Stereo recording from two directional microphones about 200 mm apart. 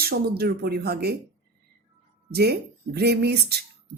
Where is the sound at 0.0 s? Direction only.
50° right (ahead or behind).